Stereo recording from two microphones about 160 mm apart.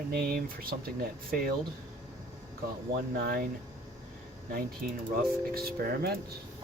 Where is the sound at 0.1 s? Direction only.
75° right (ahead or behind).